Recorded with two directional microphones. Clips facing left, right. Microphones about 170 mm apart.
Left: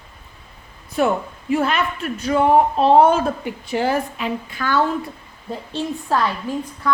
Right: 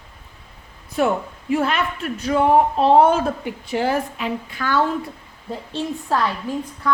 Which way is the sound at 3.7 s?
40° left (ahead or behind).